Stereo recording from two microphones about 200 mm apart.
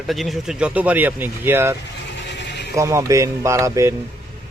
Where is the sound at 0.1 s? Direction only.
Centre (ahead or behind).